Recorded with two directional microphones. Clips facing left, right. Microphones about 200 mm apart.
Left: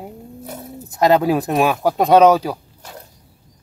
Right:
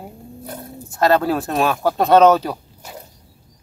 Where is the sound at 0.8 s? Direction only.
15° left (ahead or behind).